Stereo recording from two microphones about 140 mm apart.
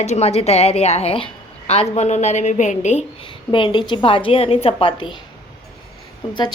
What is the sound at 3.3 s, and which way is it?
A woman's voice, 35° left (ahead or behind).